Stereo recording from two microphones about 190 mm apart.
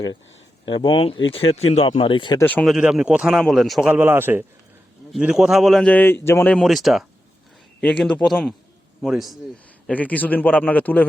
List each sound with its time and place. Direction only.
0.7 s speech: 25° left (ahead or behind)
2.4 s a man's voice: 5° left (ahead or behind)